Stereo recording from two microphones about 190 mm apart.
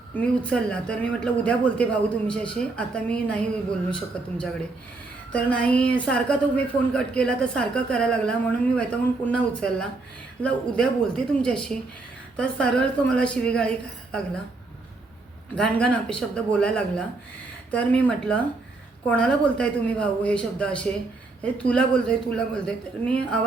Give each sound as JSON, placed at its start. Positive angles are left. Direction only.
{"t": 0.2, "sound": "a woman's voice", "side_deg": 5}
{"t": 5.3, "sound": "a woman's voice", "side_deg": 5}
{"t": 15.5, "sound": "a woman's voice", "side_deg": 5}